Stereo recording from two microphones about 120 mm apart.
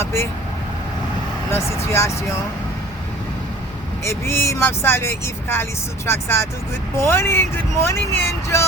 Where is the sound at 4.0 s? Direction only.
20° left (ahead or behind).